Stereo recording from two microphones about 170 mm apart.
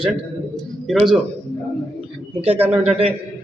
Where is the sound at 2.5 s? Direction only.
10° right (ahead or behind).